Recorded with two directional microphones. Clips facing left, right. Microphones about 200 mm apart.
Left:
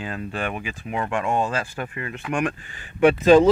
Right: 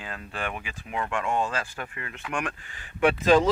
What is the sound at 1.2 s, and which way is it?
Speech, 40° left (ahead or behind).